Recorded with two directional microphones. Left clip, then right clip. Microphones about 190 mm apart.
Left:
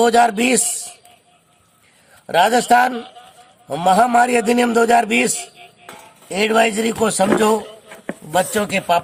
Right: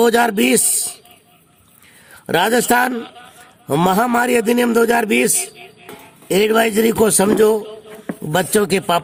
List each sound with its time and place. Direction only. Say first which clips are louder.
0.0 s a man's voice: even; 55° right (ahead or behind)
2.2 s a man's voice: left 1 dB; 55° right (ahead or behind)
3.0 s a man's voice: right 2 dB; 15° right (ahead or behind)
3.7 s a man's voice: left 2 dB; 55° right (ahead or behind)